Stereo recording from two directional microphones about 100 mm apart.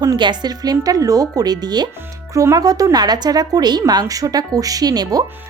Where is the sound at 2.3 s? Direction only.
35° right (ahead or behind).